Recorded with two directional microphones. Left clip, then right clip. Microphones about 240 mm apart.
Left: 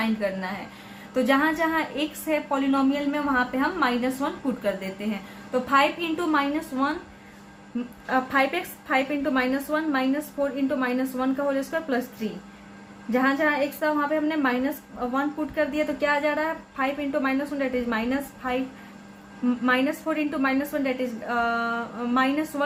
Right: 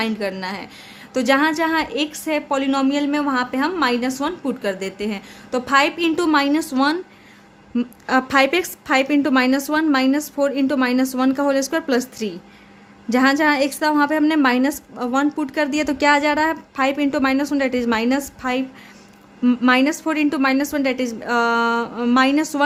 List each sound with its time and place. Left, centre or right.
0.0 s a woman's voice: right
8.0 s a woman's voice: right